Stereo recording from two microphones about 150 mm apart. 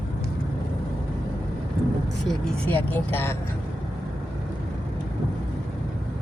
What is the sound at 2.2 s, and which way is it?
Vehicle, 10° left (ahead or behind).